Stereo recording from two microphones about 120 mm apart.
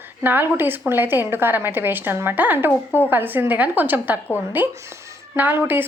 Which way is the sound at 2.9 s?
15° left (ahead or behind).